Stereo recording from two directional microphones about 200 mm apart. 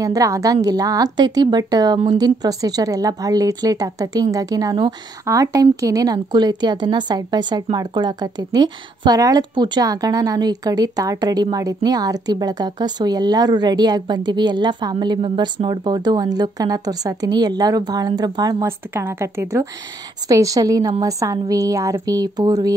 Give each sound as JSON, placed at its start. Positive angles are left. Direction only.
{"t": 0.0, "sound": "speech", "side_deg": -15}